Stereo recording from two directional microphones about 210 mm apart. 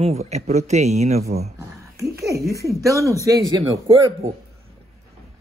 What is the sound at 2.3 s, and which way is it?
Speech, 15° right (ahead or behind).